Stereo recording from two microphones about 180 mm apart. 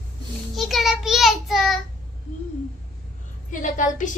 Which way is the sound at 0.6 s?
Centre (ahead or behind).